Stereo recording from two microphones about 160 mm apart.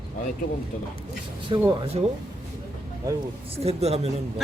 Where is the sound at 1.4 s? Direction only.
30° right (ahead or behind).